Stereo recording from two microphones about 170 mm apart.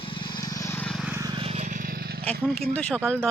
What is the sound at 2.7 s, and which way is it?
Speech, 10° left (ahead or behind).